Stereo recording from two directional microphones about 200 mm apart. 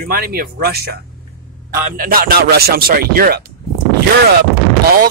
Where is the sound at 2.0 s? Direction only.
45° right (ahead or behind).